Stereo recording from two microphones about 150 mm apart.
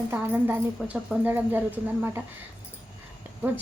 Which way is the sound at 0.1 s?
15° right (ahead or behind).